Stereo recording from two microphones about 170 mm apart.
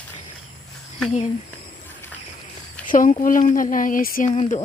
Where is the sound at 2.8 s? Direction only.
50° left (ahead or behind).